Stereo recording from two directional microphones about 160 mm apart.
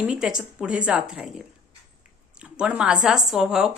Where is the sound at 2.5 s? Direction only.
5° right (ahead or behind).